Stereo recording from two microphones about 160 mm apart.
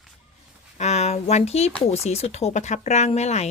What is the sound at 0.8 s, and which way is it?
A woman's voice, 45° left (ahead or behind).